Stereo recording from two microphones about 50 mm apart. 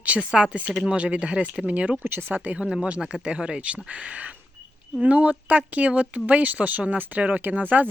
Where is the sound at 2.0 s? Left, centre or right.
Right.